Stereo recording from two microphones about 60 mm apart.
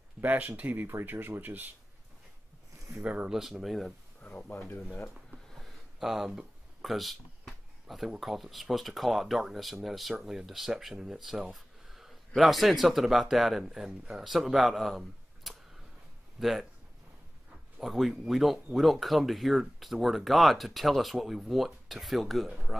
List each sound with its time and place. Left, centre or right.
0.2 s speech: right
3.0 s speech: right
3.3 s speech: centre
4.2 s speech: centre
5.5 s a sound: centre
8.2 s speech: centre
11.5 s a sound: centre
12.4 s speech: centre
17.7 s speech: centre